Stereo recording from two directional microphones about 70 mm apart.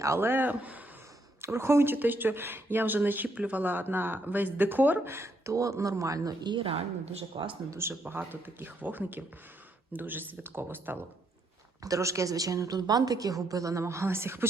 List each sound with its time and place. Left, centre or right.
0.0 s a woman's voice: right
0.3 s speech: right
1.4 s speech: right
7.3 s speech: right
8.0 s speech: right
11.8 s a woman's voice: right